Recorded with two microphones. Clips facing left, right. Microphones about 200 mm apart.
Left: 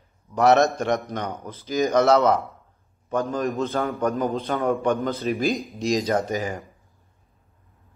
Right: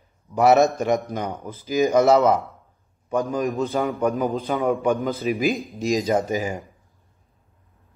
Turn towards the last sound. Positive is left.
turn(degrees=-10)  # may be behind; listen again after turning